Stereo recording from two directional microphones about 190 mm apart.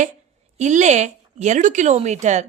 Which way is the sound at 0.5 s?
40° right (ahead or behind).